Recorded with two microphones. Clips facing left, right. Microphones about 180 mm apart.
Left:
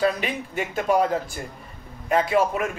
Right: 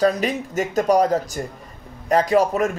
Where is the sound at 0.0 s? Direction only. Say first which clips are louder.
Right 4 dB; 40° right (ahead or behind).